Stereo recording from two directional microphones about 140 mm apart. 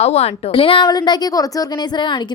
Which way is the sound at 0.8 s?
30° left (ahead or behind).